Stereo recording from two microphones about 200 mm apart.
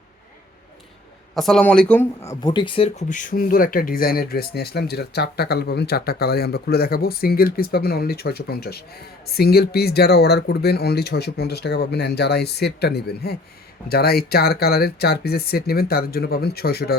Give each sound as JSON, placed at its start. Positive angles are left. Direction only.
{"t": 1.4, "sound": "speech", "side_deg": 0}